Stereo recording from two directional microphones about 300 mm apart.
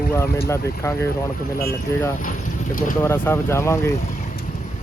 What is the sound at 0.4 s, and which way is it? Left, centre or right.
Speech, centre.